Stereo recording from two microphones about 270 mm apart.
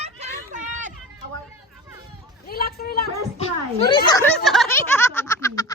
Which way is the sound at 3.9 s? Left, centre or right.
Centre.